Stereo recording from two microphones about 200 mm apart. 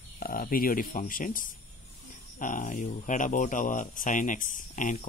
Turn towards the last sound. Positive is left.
turn(degrees=40)  # may be behind; listen again after turning